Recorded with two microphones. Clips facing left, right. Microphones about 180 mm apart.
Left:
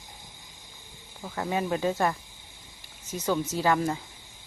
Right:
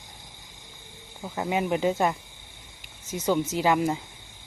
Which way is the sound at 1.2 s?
15° right (ahead or behind).